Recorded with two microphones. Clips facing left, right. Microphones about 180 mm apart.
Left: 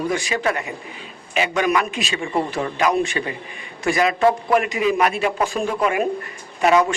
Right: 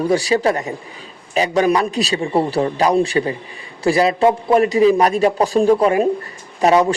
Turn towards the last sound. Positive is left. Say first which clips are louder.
# right 3 dB
turn(degrees=-35)  # may be behind; listen again after turning